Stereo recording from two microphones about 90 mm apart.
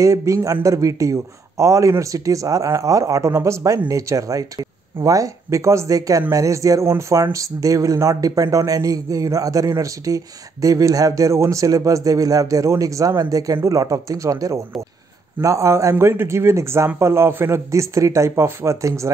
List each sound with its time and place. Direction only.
0.0 s speech: 35° right (ahead or behind)